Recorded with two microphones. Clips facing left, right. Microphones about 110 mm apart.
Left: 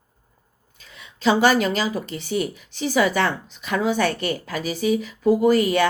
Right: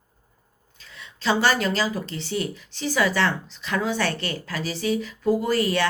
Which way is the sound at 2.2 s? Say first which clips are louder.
Left 5 dB; 15° left (ahead or behind).